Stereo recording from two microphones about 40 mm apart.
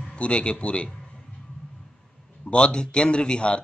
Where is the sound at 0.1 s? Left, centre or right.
Left.